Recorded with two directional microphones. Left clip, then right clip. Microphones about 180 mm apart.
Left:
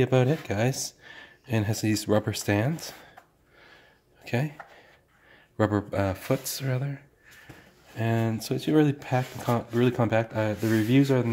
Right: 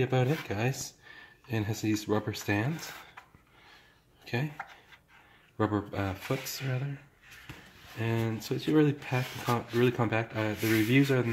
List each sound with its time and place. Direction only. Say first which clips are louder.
0.0 s speech: left 5 dB; 55° left (ahead or behind)
4.2 s speech: left 5 dB; 55° left (ahead or behind)
5.6 s speech: left 5 dB; 55° left (ahead or behind)
8.0 s speech: left 5 dB; 55° left (ahead or behind)